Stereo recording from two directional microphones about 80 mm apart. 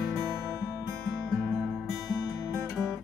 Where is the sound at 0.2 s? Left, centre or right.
Right.